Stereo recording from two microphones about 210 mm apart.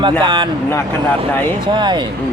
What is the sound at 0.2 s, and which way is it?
Speech, 20° right (ahead or behind).